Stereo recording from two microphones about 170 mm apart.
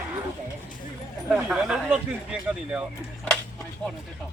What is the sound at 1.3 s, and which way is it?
Speech, 5° right (ahead or behind).